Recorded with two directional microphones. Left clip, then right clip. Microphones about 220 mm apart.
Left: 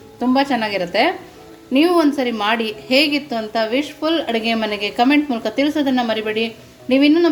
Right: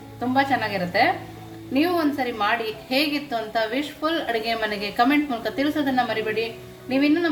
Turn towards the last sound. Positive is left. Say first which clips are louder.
# left 7 dB
turn(degrees=35)  # may be behind; listen again after turning